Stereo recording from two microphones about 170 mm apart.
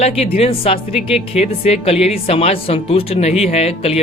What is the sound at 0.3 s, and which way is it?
Speech, 35° left (ahead or behind).